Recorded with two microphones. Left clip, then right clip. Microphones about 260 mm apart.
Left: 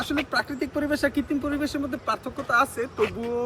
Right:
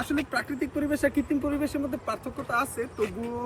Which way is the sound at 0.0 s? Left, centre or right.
Left.